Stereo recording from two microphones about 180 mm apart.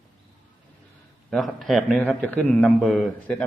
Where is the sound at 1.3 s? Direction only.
Centre (ahead or behind).